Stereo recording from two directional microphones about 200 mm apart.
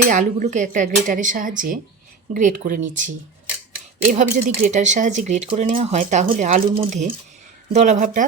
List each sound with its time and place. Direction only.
0.1 s speech: 40° right (ahead or behind)
4.1 s speech: 40° right (ahead or behind)